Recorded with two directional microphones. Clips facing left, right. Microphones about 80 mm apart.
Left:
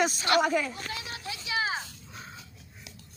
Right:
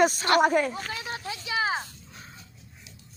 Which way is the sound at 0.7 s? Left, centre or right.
Right.